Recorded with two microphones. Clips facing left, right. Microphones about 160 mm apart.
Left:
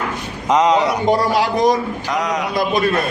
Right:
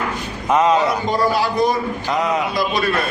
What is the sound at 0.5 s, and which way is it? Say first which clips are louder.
Speech: left 1 dB; 15° left (ahead or behind).